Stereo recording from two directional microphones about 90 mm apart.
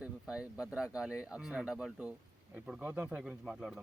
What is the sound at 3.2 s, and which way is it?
Speech, 5° right (ahead or behind).